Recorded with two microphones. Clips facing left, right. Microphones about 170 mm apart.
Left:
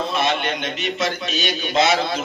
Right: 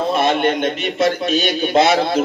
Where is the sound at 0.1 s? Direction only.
50° right (ahead or behind).